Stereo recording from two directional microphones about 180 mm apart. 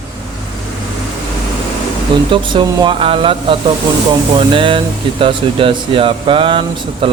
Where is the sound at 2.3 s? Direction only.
25° right (ahead or behind).